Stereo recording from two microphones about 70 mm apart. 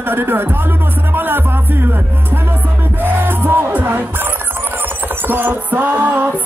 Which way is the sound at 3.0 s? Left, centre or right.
Right.